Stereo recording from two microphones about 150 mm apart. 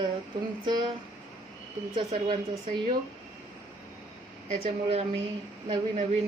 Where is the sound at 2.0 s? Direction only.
30° right (ahead or behind).